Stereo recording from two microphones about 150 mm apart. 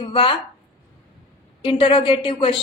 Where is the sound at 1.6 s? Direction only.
35° left (ahead or behind).